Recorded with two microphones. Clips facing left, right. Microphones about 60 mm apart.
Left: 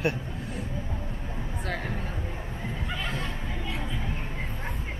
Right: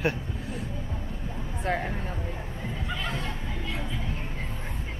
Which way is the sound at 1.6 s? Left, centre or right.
Right.